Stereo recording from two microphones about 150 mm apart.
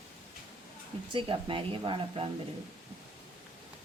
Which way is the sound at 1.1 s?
35° right (ahead or behind).